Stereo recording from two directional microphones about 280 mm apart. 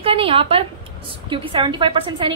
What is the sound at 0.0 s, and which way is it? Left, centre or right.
A woman's voice, centre.